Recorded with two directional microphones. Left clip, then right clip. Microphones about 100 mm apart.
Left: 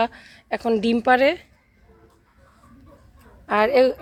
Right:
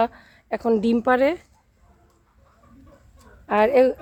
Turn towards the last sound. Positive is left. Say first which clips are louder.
# even
turn(degrees=-30)  # may be behind; listen again after turning